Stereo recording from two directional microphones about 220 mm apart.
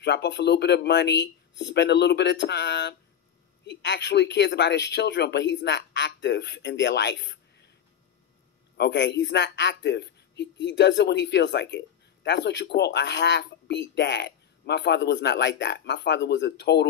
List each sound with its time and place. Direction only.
0.0 s a man's voice: 50° left (ahead or behind)
8.7 s a man's voice: 50° left (ahead or behind)